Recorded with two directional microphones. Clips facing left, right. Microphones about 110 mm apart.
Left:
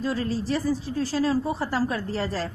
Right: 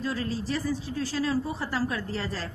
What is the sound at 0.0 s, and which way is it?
A woman's voice, 30° left (ahead or behind).